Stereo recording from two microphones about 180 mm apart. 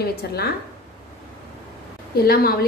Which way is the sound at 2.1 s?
60° left (ahead or behind).